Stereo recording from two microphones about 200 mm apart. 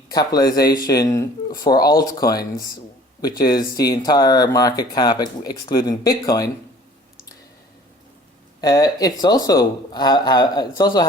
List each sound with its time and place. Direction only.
0.1 s speech: 20° left (ahead or behind)
3.7 s speech: 20° left (ahead or behind)
8.6 s speech: 20° left (ahead or behind)